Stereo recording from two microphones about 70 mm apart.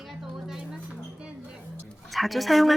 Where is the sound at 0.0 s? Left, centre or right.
Centre.